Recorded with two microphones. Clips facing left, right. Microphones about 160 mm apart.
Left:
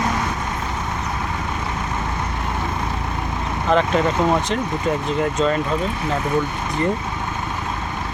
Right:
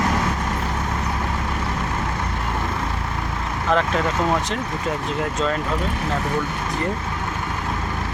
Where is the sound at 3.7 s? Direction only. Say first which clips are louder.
Left 3 dB; centre (ahead or behind).